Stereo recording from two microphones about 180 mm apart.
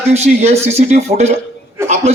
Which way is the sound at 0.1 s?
35° right (ahead or behind).